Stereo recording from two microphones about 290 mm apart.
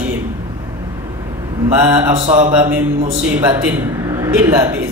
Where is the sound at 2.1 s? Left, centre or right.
Right.